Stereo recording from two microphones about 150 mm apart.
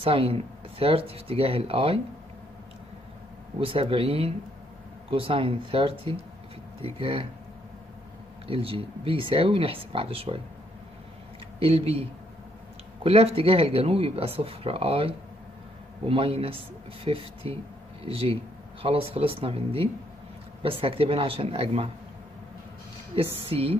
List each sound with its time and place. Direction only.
0.0 s speech: 40° right (ahead or behind)
3.6 s speech: 40° right (ahead or behind)
8.5 s speech: 40° right (ahead or behind)
11.6 s speech: 40° right (ahead or behind)
23.1 s a woman's voice: 35° right (ahead or behind)